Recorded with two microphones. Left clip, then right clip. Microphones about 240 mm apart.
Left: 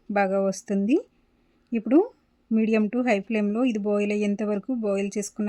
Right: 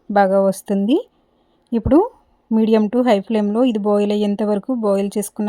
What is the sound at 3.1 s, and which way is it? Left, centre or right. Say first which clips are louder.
Speech: right 6 dB; right.